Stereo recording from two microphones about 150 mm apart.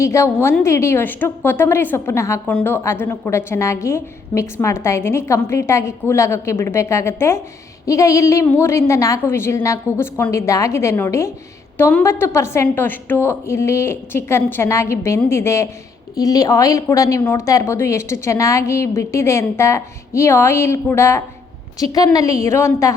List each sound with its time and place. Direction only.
0.0 s a woman's voice: 20° left (ahead or behind)